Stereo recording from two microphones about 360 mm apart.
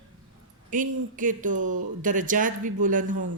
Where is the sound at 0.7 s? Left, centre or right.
Right.